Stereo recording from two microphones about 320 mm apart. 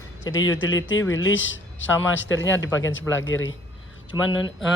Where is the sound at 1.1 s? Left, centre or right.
Left.